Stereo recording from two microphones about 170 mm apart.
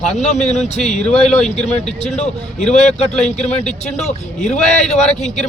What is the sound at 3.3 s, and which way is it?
A man's voice, 45° left (ahead or behind).